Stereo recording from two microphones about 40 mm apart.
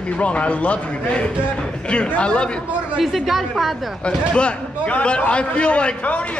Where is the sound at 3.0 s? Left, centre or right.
Centre.